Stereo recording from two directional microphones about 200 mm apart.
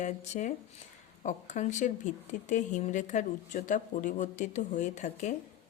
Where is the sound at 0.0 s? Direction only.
35° left (ahead or behind).